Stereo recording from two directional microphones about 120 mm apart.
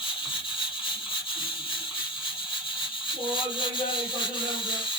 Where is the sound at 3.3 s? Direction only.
45° left (ahead or behind).